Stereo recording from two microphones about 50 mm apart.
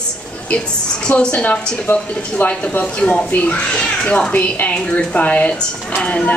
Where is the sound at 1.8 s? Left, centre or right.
Left.